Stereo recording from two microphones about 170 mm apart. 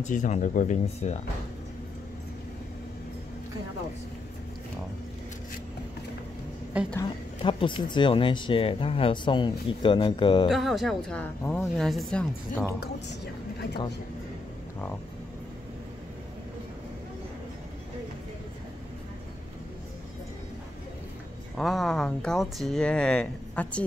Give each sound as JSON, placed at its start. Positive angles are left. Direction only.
{"t": 0.0, "sound": "speech", "side_deg": 45}
{"t": 6.7, "sound": "a woman's voice", "side_deg": -10}
{"t": 7.4, "sound": "speech", "side_deg": 30}
{"t": 10.5, "sound": "a woman's voice", "side_deg": 0}
{"t": 12.8, "sound": "speech", "side_deg": 75}
{"t": 21.5, "sound": "a woman's voice", "side_deg": 0}